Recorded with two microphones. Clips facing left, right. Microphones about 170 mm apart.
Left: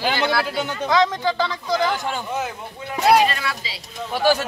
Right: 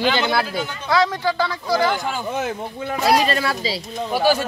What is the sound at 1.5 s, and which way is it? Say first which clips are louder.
Speech: right 2 dB; 5° right (ahead or behind).